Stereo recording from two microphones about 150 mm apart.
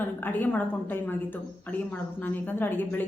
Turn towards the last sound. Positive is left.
turn(degrees=15)  # may be behind; listen again after turning